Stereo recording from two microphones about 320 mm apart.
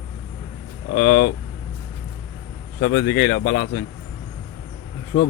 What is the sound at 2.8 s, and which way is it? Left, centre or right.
Speech, left.